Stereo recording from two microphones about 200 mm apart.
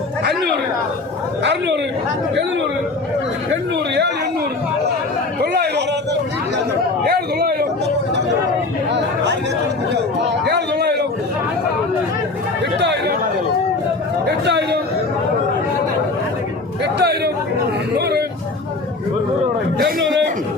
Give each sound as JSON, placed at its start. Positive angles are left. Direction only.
{"t": 0.3, "sound": "chatter", "side_deg": -55}
{"t": 1.5, "sound": "speech", "side_deg": -60}
{"t": 5.4, "sound": "a sound", "side_deg": -55}
{"t": 7.1, "sound": "a sound", "side_deg": -50}
{"t": 8.9, "sound": "chatter", "side_deg": -60}
{"t": 12.8, "sound": "chatter", "side_deg": -60}
{"t": 14.3, "sound": "chatter", "side_deg": -55}
{"t": 16.8, "sound": "a sound", "side_deg": -55}
{"t": 19.8, "sound": "chatter", "side_deg": -60}